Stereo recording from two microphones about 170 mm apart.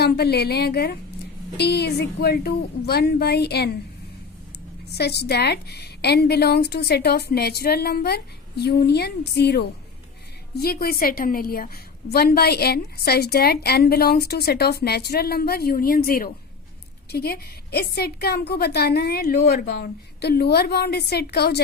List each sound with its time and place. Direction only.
0.0 s a woman's voice: 70° left (ahead or behind)
4.9 s a woman's voice: 75° left (ahead or behind)